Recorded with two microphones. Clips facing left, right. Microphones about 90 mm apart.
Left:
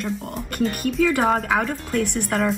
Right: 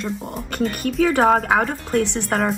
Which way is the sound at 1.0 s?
60° right (ahead or behind).